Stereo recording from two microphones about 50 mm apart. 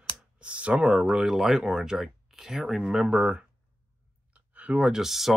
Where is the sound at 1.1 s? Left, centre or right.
Centre.